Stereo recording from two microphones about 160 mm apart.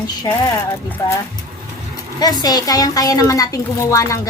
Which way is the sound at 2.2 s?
25° left (ahead or behind).